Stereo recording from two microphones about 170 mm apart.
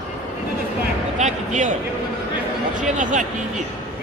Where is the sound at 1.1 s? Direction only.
45° right (ahead or behind).